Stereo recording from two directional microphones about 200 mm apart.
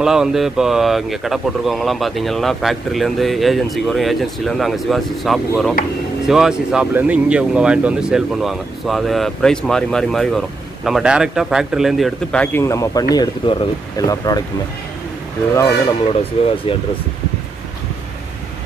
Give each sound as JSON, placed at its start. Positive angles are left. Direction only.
{"t": 0.0, "sound": "speech", "side_deg": -5}
{"t": 16.6, "sound": "speech", "side_deg": 25}